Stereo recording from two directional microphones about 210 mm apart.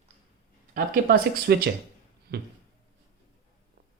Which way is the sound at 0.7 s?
45° right (ahead or behind).